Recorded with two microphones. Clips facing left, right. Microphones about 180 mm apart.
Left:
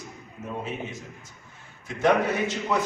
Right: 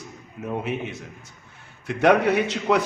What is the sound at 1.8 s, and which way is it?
Speech, 70° right (ahead or behind).